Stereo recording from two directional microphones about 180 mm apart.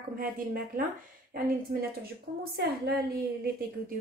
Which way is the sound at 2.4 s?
60° right (ahead or behind).